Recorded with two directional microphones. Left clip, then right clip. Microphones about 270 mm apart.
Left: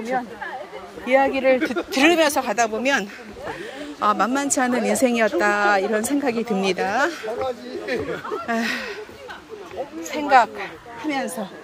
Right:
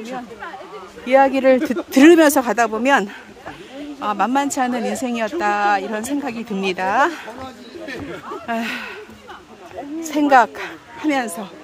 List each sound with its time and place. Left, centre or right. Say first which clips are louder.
1.0 s speech: right 4 dB; centre; by 2.5 s right
2.5 s speech: right 4 dB; centre
4.0 s speech: right 1 dB; centre
8.5 s speech: right 1 dB; centre
10.0 s speech: right 3 dB; right
11.1 s speech: right 5 dB; centre